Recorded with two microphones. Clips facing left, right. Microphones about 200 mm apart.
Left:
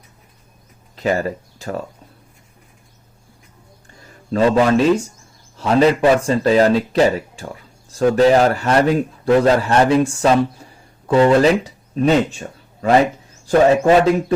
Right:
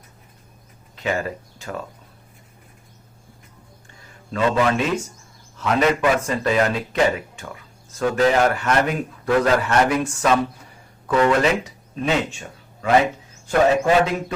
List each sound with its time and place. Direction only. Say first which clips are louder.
0.9 s speech: left 5 dB; 35° left (ahead or behind)
4.3 s a man's voice: left 5 dB; 35° left (ahead or behind)